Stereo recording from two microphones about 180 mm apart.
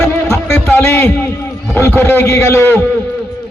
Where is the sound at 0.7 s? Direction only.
10° left (ahead or behind).